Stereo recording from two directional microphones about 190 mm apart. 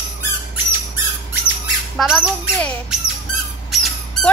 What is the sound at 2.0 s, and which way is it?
Speech, centre (ahead or behind).